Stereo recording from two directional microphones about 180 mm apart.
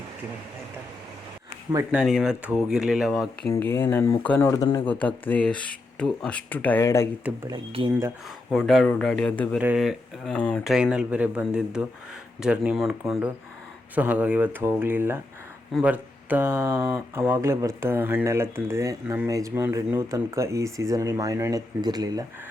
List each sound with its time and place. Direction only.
1.9 s speech: 5° right (ahead or behind)
3.5 s speech: 15° left (ahead or behind)
4.9 s speech: 10° left (ahead or behind)
7.4 s speech: 25° right (ahead or behind)
8.4 s speech: centre (ahead or behind)
9.6 s speech: 5° right (ahead or behind)
10.7 s speech: 5° right (ahead or behind); by 22.3 s 20° right (ahead or behind)